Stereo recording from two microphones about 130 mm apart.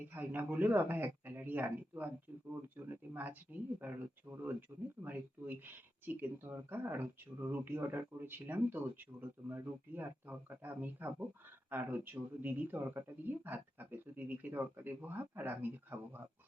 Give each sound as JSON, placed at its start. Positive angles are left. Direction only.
{"t": 0.0, "sound": "speech", "side_deg": -15}